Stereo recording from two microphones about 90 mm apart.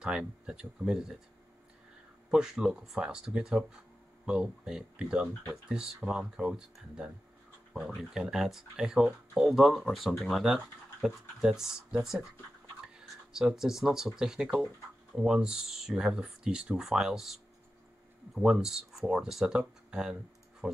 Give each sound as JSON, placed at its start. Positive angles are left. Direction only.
{"t": 0.0, "sound": "speech", "side_deg": -10}
{"t": 2.3, "sound": "speech", "side_deg": -5}